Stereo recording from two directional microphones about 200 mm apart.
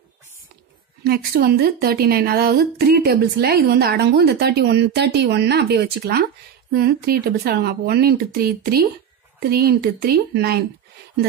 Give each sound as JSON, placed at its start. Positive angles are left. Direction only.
{"t": 1.0, "sound": "a woman's voice", "side_deg": -50}